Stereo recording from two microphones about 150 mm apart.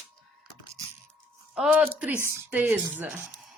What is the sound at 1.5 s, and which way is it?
Speech, 5° right (ahead or behind).